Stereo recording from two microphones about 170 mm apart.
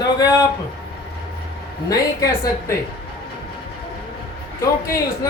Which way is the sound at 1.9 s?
20° left (ahead or behind).